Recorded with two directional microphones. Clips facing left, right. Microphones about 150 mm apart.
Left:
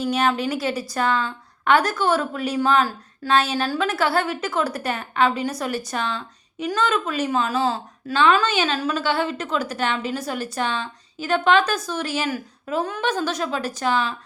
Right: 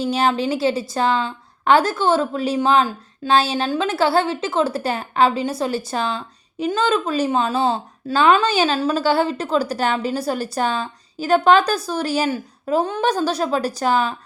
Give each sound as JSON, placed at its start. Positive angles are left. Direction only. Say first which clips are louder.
{"t": 0.0, "sound": "a woman's voice", "louder": "right 2 dB", "side_deg": -30}